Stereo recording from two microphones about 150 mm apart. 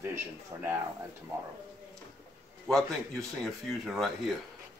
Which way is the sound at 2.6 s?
5° left (ahead or behind).